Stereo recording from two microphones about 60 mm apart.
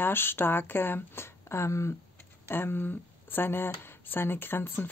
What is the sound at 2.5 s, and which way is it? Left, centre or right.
Speech, left.